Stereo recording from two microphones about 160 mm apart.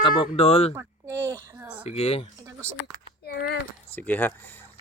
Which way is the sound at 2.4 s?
15° right (ahead or behind).